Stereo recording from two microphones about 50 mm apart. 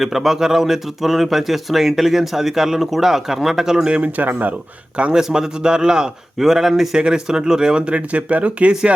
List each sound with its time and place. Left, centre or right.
0.0 s speech: centre
3.8 s speech: right
4.3 s speech: right
5.1 s speech: centre